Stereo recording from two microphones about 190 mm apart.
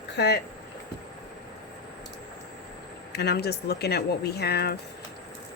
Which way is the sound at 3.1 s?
60° left (ahead or behind).